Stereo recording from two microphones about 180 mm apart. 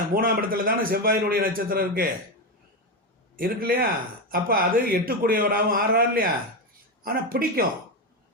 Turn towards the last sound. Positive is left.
turn(degrees=-55)  # may be behind; listen again after turning